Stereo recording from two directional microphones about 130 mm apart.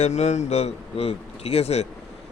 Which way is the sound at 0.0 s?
60° left (ahead or behind).